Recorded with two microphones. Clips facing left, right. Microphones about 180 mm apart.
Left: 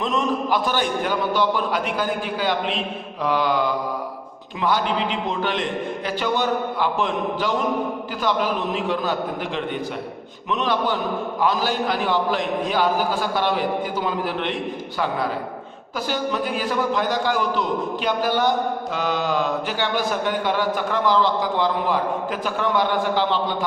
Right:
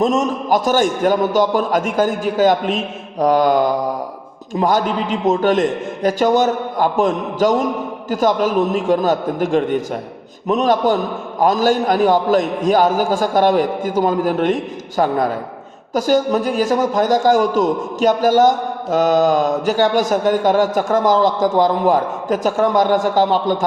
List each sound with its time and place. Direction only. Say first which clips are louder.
0.0 s a man's voice: right 6 dB; 45° right (ahead or behind)